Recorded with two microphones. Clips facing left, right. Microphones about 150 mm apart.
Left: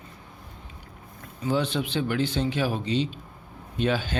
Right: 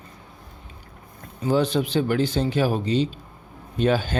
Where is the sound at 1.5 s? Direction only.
40° right (ahead or behind).